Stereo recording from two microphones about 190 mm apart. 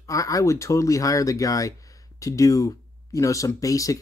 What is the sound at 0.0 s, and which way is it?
Speech, 15° left (ahead or behind).